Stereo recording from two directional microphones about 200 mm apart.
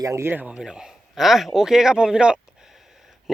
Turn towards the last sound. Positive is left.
turn(degrees=0)  # may be behind; listen again after turning